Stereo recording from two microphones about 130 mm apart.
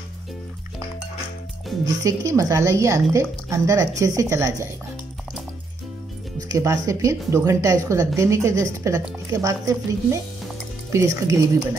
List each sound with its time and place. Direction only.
2.0 s a woman's voice: 25° right (ahead or behind)
6.6 s a woman's voice: 25° right (ahead or behind)